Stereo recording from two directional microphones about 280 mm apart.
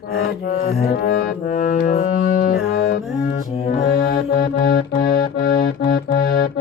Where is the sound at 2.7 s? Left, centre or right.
Left.